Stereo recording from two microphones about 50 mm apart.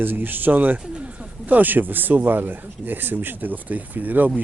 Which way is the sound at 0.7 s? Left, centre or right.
Right.